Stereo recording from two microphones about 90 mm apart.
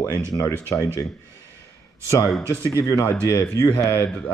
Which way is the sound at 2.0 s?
35° left (ahead or behind).